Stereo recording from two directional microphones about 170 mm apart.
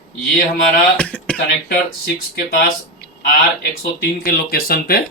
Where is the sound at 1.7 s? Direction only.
55° left (ahead or behind).